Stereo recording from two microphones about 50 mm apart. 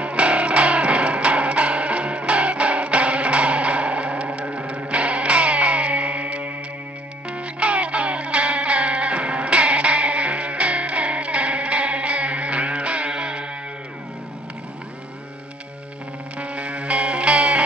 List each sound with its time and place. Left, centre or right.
0.0 s music: right
16.3 s music: right